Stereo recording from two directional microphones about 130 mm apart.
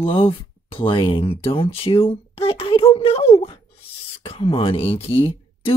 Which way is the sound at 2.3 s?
45° left (ahead or behind).